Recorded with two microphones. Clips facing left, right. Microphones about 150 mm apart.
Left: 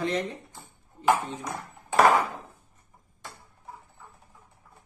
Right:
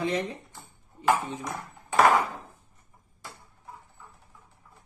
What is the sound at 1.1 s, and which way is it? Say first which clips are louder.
Speech: even; 10° left (ahead or behind).